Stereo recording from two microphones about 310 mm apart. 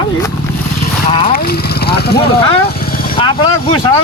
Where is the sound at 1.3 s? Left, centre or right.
Left.